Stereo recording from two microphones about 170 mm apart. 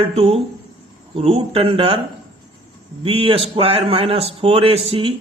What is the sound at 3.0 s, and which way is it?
Speech, 35° right (ahead or behind).